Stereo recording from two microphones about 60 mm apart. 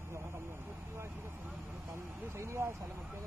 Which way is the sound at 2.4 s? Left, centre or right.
Right.